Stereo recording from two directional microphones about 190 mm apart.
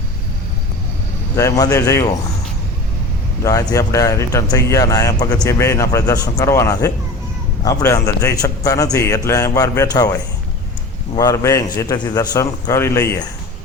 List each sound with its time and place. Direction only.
1.4 s a man's voice: 15° left (ahead or behind)
3.4 s a man's voice: 20° left (ahead or behind)
11.2 s a man's voice: 20° left (ahead or behind)